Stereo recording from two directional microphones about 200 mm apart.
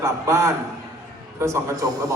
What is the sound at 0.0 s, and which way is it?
A man's voice, 15° right (ahead or behind).